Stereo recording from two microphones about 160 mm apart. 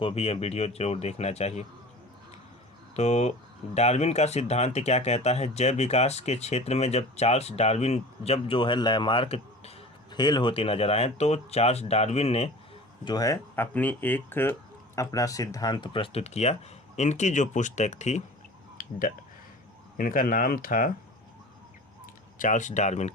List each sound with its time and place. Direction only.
0.0 s speech: 40° left (ahead or behind)
2.9 s speech: 45° left (ahead or behind)
13.1 s speech: 20° left (ahead or behind); by 18.2 s 45° left (ahead or behind)
18.8 s a sound: 60° left (ahead or behind)
20.0 s speech: 60° left (ahead or behind)
22.0 s speech: 55° left (ahead or behind)